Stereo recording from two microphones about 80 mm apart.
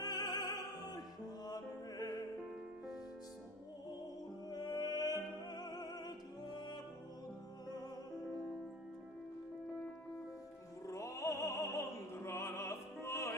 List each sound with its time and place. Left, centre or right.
0.0 s music: left
4.5 s music: left
10.9 s opera: left